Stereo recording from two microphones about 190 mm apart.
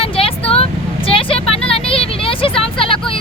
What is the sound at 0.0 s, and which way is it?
Vehicle, 30° left (ahead or behind).